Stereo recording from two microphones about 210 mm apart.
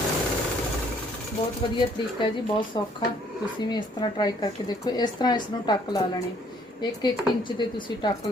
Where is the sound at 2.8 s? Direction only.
20° left (ahead or behind).